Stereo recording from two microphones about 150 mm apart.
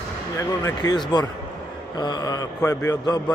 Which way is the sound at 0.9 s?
30° left (ahead or behind).